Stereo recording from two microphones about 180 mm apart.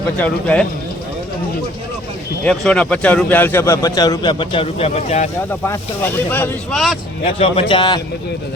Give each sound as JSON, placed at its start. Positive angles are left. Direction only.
{"t": 0.2, "sound": "speech", "side_deg": 5}
{"t": 2.4, "sound": "speech", "side_deg": 5}
{"t": 5.5, "sound": "speech", "side_deg": 15}
{"t": 7.3, "sound": "a man's voice", "side_deg": 30}